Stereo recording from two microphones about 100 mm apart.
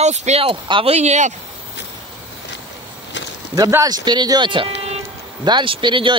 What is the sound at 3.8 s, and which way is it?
Speech, 45° right (ahead or behind).